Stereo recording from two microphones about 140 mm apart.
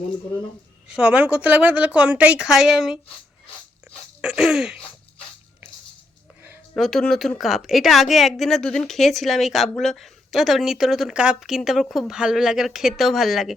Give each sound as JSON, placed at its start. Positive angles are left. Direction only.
{"t": 0.9, "sound": "a woman's voice", "side_deg": -5}
{"t": 4.2, "sound": "a woman's voice", "side_deg": -5}
{"t": 6.7, "sound": "a woman's voice", "side_deg": 0}